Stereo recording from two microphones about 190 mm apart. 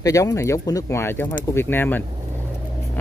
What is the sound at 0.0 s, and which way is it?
Speech, 15° left (ahead or behind).